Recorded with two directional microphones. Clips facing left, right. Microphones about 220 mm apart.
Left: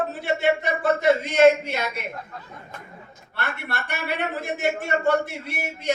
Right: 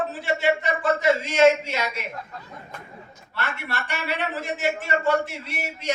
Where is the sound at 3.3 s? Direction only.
60° left (ahead or behind).